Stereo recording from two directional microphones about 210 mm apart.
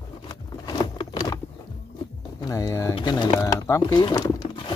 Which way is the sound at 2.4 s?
15° left (ahead or behind).